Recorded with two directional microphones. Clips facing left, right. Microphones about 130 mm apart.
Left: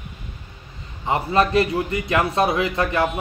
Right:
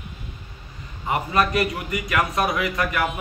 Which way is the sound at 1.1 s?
30° left (ahead or behind).